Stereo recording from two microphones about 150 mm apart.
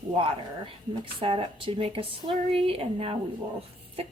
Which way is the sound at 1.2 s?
35° right (ahead or behind).